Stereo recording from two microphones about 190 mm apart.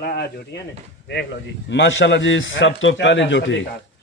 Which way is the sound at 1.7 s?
75° left (ahead or behind).